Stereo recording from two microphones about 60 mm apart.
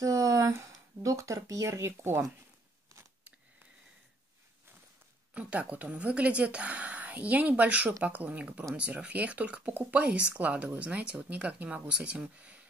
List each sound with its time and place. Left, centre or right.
0.0 s speech: right
5.3 s speech: right